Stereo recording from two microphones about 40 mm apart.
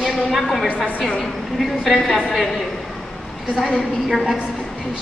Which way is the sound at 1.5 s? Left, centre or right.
Centre.